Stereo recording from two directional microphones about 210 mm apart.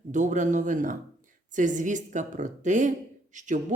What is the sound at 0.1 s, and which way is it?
Speech, 35° right (ahead or behind).